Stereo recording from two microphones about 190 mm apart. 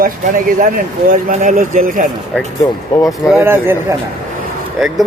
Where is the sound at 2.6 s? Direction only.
15° left (ahead or behind).